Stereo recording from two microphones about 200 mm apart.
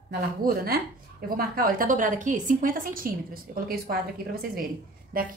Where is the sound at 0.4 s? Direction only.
45° right (ahead or behind).